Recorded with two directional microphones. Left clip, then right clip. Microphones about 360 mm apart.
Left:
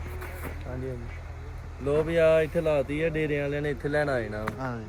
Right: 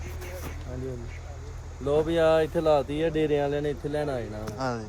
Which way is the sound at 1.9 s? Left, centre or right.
Centre.